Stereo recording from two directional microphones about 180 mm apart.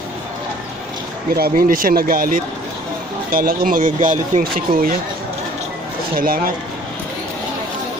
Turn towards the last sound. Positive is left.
turn(degrees=-50)  # may be behind; listen again after turning